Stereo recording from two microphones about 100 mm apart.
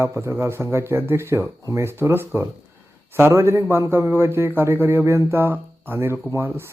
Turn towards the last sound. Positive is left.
turn(degrees=-25)  # may be behind; listen again after turning